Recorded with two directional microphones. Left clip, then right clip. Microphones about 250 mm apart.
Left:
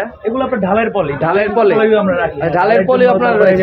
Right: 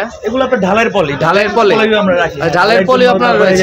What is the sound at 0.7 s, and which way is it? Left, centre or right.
Speech, right.